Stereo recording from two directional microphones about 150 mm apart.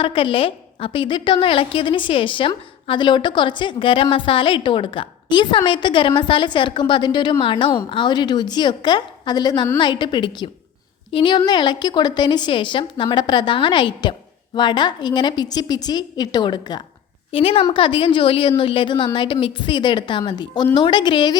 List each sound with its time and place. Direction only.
0.0 s a woman's voice: 35° left (ahead or behind)